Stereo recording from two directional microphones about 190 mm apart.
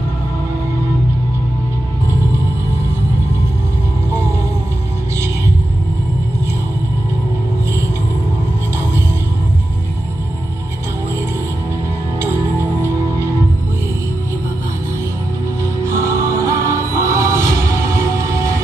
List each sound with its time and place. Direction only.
16.1 s music: 15° right (ahead or behind)